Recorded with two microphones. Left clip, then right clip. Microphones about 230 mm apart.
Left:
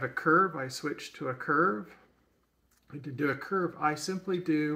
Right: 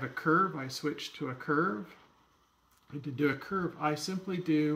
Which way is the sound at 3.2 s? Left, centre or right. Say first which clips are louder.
Left 2 dB; right.